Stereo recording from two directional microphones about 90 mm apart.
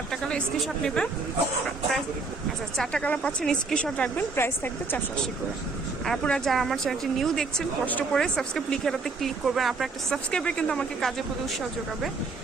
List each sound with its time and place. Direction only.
0.1 s a sound: 10° left (ahead or behind)
0.6 s speech: 10° left (ahead or behind)
2.7 s speech: 10° left (ahead or behind)
4.4 s a woman's voice: 25° left (ahead or behind)
6.1 s speech: 5° left (ahead or behind)
10.3 s speech: 10° left (ahead or behind)